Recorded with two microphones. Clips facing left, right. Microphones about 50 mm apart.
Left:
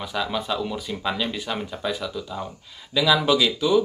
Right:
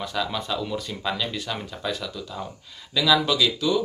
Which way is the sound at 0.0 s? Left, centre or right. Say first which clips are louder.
Left 1 dB; centre.